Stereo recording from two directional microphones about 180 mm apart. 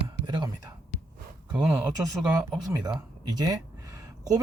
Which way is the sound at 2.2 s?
5° right (ahead or behind).